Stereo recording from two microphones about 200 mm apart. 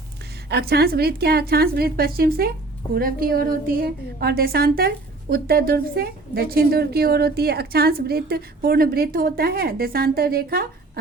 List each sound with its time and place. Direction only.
0.4 s a woman's voice: 55° right (ahead or behind)